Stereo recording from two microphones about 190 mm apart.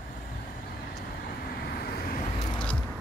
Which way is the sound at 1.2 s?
55° left (ahead or behind).